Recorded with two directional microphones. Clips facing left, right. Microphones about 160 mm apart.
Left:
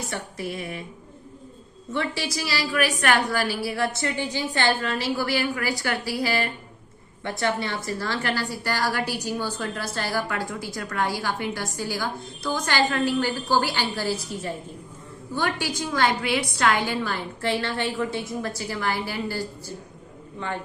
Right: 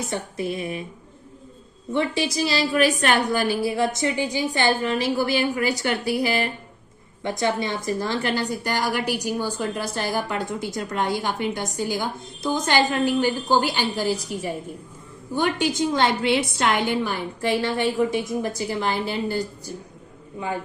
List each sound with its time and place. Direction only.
0.1 s a woman's voice: 20° right (ahead or behind)
1.9 s a woman's voice: 20° right (ahead or behind)